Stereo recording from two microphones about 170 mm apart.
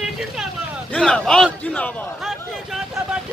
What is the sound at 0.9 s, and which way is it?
Speech, 5° left (ahead or behind).